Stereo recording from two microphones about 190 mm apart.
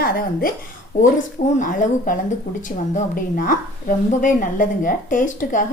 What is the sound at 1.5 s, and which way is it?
A woman's voice, 40° left (ahead or behind).